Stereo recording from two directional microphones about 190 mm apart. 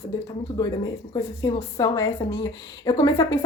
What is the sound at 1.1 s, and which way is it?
A woman's voice, 20° left (ahead or behind).